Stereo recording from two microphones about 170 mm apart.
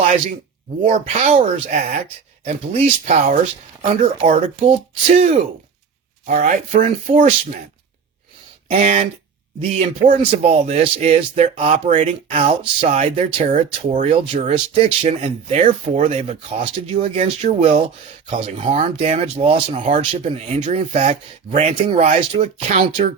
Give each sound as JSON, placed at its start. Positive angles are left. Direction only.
{"t": 0.8, "sound": "speech", "side_deg": -45}
{"t": 2.4, "sound": "speech", "side_deg": -40}
{"t": 6.2, "sound": "speech", "side_deg": -50}
{"t": 7.1, "sound": "speech", "side_deg": -40}
{"t": 8.6, "sound": "speech", "side_deg": -50}
{"t": 19.7, "sound": "speech", "side_deg": -45}